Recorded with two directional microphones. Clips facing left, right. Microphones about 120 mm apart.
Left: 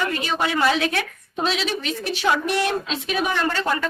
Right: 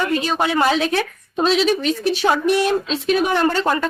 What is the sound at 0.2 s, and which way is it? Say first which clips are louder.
A woman's voice: right 3 dB; 40° right (ahead or behind).